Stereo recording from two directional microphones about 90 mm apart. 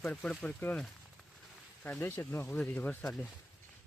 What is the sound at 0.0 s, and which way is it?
Speech, 15° left (ahead or behind).